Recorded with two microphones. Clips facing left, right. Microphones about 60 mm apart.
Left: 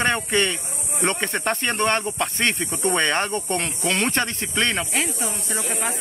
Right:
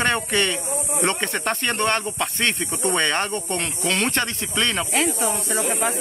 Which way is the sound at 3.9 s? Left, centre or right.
Left.